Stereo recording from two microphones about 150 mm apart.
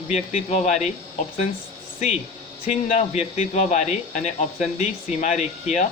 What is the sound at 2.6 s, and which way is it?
A man's voice, 50° left (ahead or behind).